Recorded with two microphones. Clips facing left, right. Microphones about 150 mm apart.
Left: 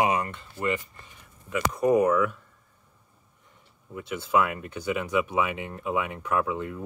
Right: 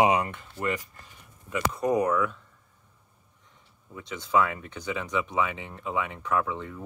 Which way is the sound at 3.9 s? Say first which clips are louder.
Left 1 dB; 5° left (ahead or behind).